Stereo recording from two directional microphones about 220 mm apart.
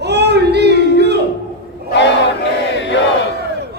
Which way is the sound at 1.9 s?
55° left (ahead or behind).